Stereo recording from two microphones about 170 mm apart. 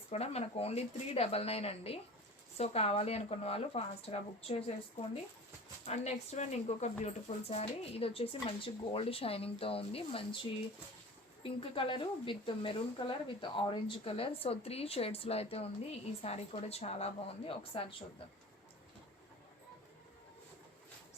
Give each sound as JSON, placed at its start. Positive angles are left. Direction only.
{"t": 0.1, "sound": "speech", "side_deg": 40}
{"t": 11.4, "sound": "speech", "side_deg": 30}